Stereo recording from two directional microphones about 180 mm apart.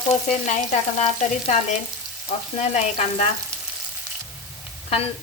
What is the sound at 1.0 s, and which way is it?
Speech, 40° left (ahead or behind).